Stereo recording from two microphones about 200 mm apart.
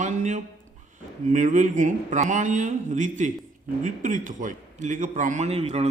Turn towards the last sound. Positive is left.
turn(degrees=-30)  # may be behind; listen again after turning